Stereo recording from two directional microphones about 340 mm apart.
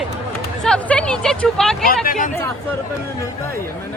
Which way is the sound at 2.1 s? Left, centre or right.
Left.